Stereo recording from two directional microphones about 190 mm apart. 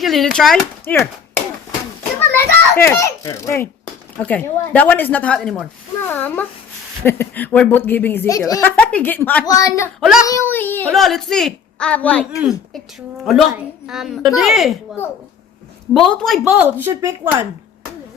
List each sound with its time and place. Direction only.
0.0 s a child's voice: centre (ahead or behind); by 9.9 s 15° left (ahead or behind)
10.0 s speech: centre (ahead or behind)
10.2 s speech: 15° left (ahead or behind); by 12.8 s centre (ahead or behind)
13.8 s speech: centre (ahead or behind)
15.9 s speech: centre (ahead or behind); by 17.4 s 15° right (ahead or behind)